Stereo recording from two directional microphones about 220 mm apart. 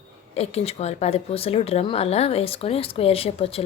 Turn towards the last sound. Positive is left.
turn(degrees=25)  # may be behind; listen again after turning